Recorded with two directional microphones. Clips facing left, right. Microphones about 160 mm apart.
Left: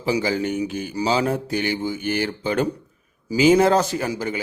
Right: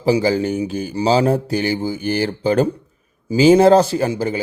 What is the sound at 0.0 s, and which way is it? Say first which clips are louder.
A man's voice: right 6 dB; 35° right (ahead or behind).